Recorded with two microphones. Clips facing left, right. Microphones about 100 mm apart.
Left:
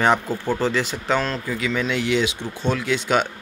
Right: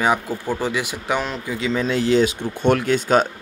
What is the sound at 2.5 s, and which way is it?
Speech, 55° right (ahead or behind).